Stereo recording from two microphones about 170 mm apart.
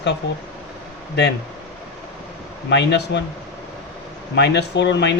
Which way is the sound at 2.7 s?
85° left.